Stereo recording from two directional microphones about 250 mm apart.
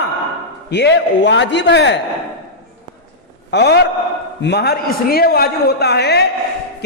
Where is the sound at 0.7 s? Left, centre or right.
Left.